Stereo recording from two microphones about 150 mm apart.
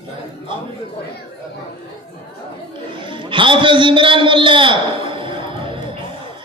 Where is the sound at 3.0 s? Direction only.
35° right (ahead or behind).